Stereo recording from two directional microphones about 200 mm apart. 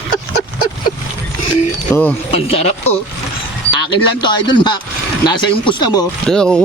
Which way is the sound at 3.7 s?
25° left (ahead or behind).